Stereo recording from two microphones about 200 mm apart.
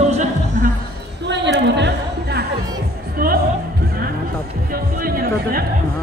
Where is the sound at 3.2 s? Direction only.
50° right (ahead or behind).